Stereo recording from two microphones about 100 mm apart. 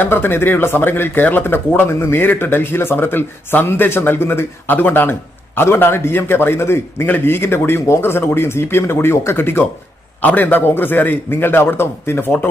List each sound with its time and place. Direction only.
0.0 s speech: 20° left (ahead or behind)